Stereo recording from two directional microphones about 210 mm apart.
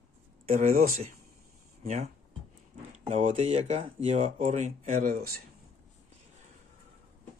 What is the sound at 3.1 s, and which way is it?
Speech, 35° right (ahead or behind).